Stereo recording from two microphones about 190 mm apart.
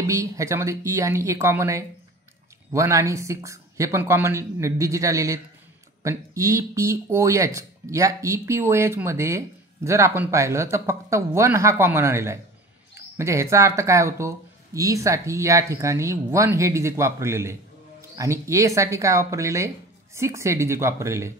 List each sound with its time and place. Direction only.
0.0 s speech: 15° right (ahead or behind)